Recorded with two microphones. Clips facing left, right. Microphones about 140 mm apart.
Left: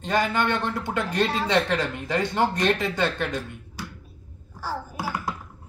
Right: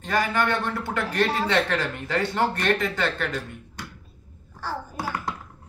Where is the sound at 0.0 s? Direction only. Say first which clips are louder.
Left 1 dB; 20° left (ahead or behind).